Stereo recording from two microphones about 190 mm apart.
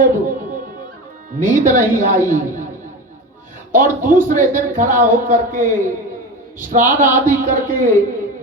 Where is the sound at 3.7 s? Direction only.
45° right (ahead or behind).